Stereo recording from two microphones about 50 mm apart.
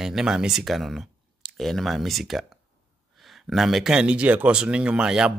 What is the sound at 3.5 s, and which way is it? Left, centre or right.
Speech, centre.